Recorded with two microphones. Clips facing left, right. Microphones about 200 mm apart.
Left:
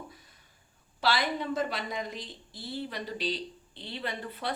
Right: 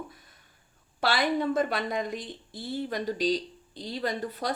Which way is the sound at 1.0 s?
50° right (ahead or behind).